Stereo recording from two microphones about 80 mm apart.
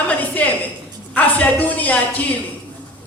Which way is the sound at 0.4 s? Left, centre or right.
Centre.